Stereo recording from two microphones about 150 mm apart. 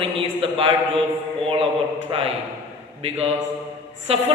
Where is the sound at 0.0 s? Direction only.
35° right (ahead or behind).